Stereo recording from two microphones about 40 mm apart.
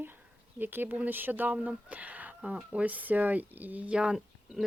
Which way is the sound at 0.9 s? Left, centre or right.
Right.